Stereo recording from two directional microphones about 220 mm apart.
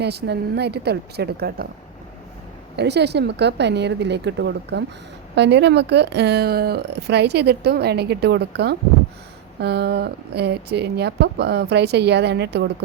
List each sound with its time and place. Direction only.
0.0 s speech: 50° right (ahead or behind)
2.7 s speech: 50° right (ahead or behind)